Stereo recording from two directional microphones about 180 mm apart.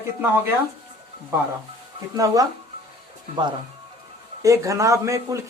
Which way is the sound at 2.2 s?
20° right (ahead or behind).